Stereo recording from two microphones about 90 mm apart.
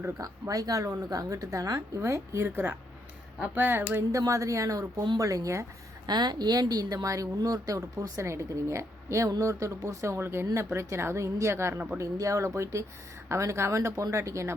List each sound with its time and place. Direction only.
0.2 s speech: 40° right (ahead or behind); by 4.0 s 25° right (ahead or behind)
4.1 s speech: 35° right (ahead or behind)
6.1 s speech: 50° right (ahead or behind); by 14.5 s 30° right (ahead or behind)